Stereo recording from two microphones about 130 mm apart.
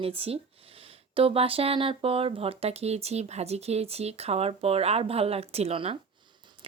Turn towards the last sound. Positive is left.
turn(degrees=-45)  # may be behind; listen again after turning